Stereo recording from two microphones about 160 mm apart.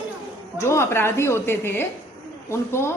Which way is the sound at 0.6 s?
15° left (ahead or behind).